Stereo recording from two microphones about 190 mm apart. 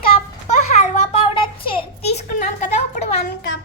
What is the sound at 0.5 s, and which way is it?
A child's voice, 35° left (ahead or behind).